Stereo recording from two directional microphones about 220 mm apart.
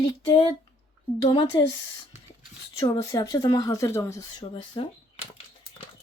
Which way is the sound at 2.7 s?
15° left (ahead or behind).